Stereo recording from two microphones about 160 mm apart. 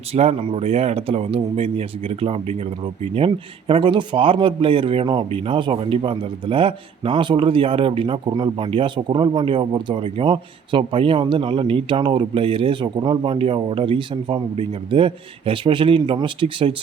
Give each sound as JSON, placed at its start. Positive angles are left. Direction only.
{"t": 0.1, "sound": "speech", "side_deg": -40}